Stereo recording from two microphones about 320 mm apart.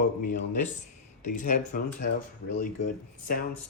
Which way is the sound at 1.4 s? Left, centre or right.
Left.